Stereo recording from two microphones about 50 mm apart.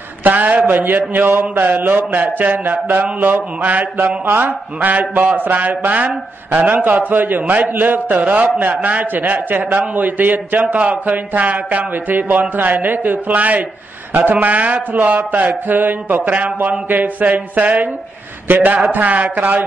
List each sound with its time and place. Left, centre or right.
0.2 s a man's voice: right
1.5 s speech: right